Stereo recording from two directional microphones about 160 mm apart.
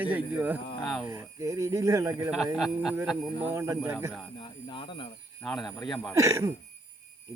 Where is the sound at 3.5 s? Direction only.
15° right (ahead or behind).